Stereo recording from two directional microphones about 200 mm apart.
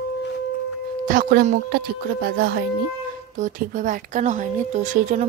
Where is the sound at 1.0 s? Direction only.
45° right (ahead or behind).